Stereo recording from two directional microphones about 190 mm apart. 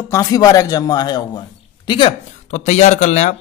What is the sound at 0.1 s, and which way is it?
Speech, 20° left (ahead or behind).